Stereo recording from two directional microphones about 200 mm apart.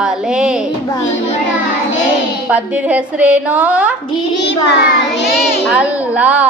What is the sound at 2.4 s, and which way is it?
A woman's voice, 5° right (ahead or behind).